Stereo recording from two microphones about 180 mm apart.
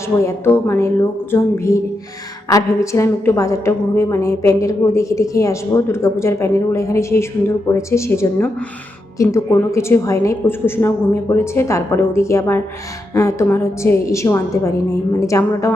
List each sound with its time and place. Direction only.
0.2 s a woman's voice: 15° left (ahead or behind)